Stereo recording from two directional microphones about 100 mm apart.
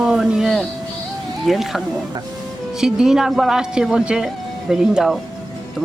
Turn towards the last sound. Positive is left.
turn(degrees=-5)  # may be behind; listen again after turning